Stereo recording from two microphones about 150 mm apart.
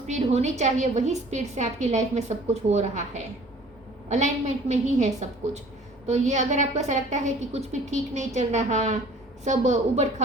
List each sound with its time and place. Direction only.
0.1 s a woman's voice: 50° right (ahead or behind)
4.1 s a woman's voice: 50° right (ahead or behind)